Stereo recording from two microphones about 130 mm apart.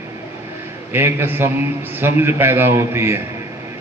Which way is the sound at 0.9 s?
15° right (ahead or behind).